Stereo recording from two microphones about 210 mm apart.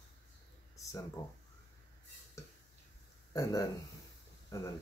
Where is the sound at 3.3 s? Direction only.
15° left (ahead or behind).